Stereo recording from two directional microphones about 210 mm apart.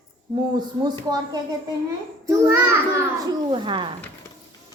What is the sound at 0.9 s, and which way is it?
A child's voice, 20° right (ahead or behind).